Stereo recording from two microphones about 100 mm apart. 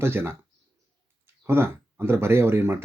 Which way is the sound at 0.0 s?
25° right (ahead or behind).